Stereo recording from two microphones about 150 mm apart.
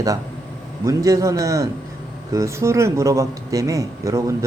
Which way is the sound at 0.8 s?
20° right (ahead or behind).